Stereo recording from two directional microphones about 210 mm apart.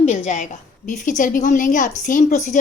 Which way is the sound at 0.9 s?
40° left (ahead or behind).